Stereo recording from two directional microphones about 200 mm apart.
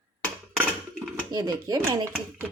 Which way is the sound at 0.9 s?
15° right (ahead or behind).